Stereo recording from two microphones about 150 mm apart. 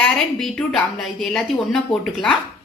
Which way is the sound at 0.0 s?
5° left (ahead or behind).